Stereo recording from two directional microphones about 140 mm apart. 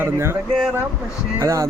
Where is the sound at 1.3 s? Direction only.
20° right (ahead or behind).